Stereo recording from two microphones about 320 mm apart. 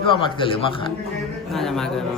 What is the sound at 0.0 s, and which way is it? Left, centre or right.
Speech, centre.